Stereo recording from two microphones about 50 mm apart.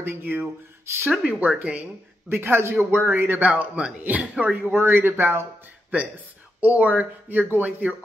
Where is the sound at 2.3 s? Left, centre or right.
Right.